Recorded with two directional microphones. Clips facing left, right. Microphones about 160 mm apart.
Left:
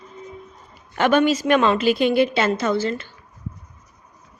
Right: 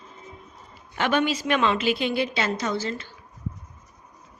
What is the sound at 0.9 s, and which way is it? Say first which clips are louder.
A woman's voice: left 6 dB; 50° left (ahead or behind).